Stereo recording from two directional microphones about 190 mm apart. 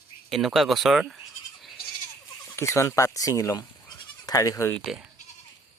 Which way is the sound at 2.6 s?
15° left (ahead or behind).